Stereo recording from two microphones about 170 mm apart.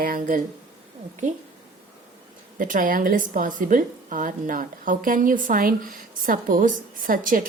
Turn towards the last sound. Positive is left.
turn(degrees=-55)  # may be behind; listen again after turning